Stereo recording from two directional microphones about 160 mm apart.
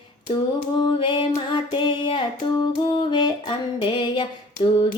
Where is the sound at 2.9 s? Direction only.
30° left (ahead or behind).